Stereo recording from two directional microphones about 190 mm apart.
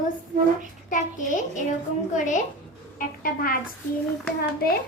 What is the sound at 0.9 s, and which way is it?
A child's voice, 40° left (ahead or behind).